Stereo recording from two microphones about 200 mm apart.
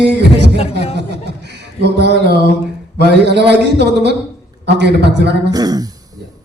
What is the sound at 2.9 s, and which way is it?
A man's voice, 55° right (ahead or behind).